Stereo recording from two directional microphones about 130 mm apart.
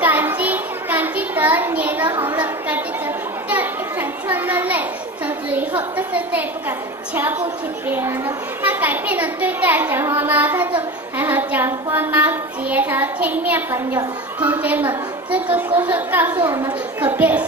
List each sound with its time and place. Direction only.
0.0 s a sound: 15° right (ahead or behind)
3.4 s children playing: 15° right (ahead or behind)
7.2 s child singing: 15° right (ahead or behind)
8.6 s child singing: 15° right (ahead or behind)
14.4 s a woman's voice: 10° right (ahead or behind)
15.8 s child singing: 15° right (ahead or behind)